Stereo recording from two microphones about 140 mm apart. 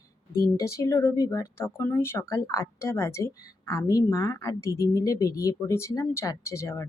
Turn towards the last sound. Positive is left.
turn(degrees=20)  # may be behind; listen again after turning